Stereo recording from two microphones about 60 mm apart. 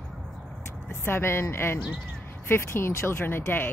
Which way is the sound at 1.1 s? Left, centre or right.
Left.